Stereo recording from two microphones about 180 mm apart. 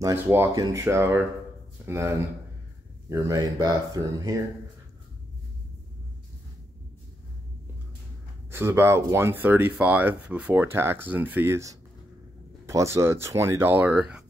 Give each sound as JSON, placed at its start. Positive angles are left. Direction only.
{"t": 0.0, "sound": "speech", "side_deg": -15}
{"t": 8.5, "sound": "speech", "side_deg": -10}